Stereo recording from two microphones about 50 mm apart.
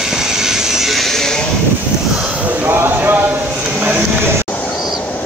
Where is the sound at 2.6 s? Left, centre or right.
Right.